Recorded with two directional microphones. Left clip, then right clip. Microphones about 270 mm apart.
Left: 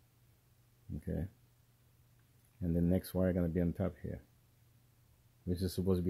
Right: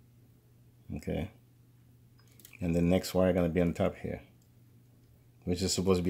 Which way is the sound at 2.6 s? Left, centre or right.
Left.